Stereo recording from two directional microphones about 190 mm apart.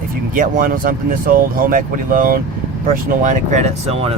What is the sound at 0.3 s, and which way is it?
Speech, 45° right (ahead or behind).